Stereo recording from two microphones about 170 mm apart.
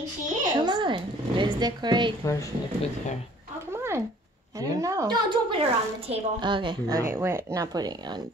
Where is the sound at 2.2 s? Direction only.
20° left (ahead or behind).